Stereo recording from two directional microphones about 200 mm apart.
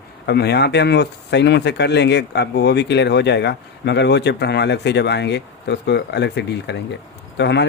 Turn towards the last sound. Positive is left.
turn(degrees=60)  # may be behind; listen again after turning